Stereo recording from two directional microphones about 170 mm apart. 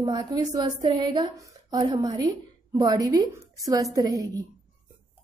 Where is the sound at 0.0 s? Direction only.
25° right (ahead or behind).